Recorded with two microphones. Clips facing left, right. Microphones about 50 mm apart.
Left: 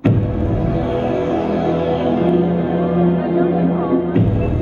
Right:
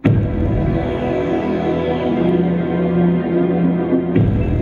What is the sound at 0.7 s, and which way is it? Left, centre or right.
Music, centre.